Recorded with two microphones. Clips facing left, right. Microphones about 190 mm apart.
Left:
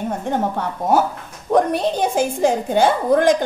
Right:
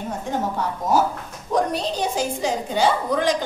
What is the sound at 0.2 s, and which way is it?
A woman's voice, 55° left (ahead or behind).